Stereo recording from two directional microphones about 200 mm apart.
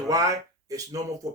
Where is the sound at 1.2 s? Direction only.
15° right (ahead or behind).